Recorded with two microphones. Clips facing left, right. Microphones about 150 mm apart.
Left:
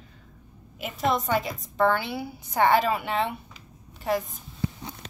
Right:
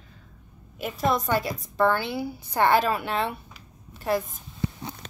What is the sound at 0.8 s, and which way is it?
A woman's voice, 20° left (ahead or behind).